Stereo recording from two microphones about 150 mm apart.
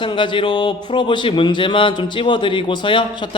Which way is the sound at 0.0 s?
35° left (ahead or behind).